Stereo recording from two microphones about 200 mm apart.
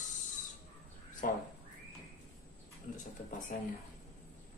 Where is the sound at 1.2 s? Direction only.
45° left (ahead or behind).